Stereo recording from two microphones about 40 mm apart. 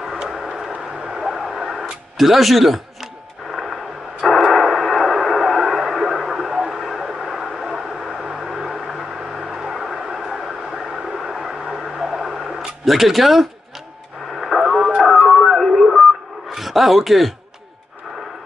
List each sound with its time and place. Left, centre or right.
0.2 s vehicle: centre
0.7 s vehicle: right
1.3 s radio: centre
3.5 s a sound: centre
6.5 s vehicle: centre
7.1 s a sound: centre
11.3 s radio: centre
15.0 s music: centre
16.4 s a sound: centre